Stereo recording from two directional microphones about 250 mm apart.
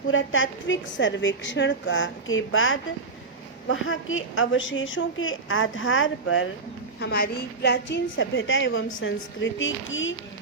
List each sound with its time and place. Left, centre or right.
0.1 s a woman's voice: left
7.0 s a woman's voice: left